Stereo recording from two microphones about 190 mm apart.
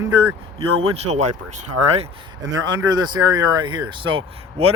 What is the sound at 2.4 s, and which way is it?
Speech, 20° right (ahead or behind).